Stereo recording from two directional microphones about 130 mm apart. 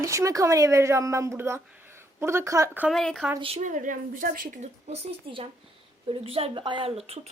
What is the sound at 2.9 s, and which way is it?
Speech, centre (ahead or behind).